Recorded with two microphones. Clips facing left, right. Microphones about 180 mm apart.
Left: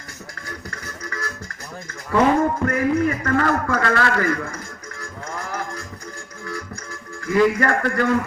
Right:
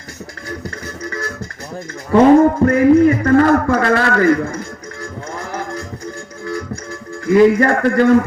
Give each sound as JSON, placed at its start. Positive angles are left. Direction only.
{"t": 2.1, "sound": "music", "side_deg": -30}
{"t": 7.3, "sound": "music", "side_deg": -25}